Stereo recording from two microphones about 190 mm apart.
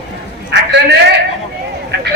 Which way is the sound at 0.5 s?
60° right (ahead or behind).